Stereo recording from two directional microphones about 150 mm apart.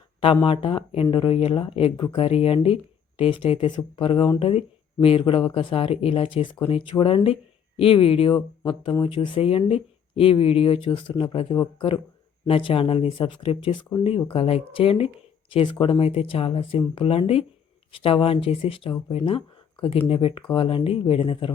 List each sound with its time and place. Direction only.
0.4 s speech: 35° left (ahead or behind)